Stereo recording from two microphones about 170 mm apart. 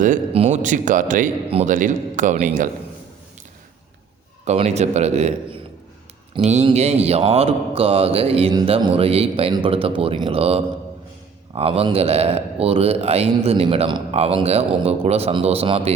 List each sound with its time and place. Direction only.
0.3 s a man's voice: 40° right (ahead or behind)
4.4 s speech: 40° right (ahead or behind)